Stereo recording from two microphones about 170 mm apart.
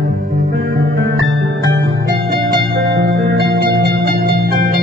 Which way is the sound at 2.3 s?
70° right (ahead or behind).